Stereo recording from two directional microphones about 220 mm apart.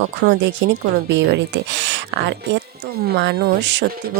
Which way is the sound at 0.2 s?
40° right (ahead or behind).